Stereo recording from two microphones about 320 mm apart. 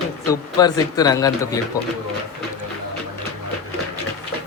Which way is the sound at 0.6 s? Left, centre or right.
Centre.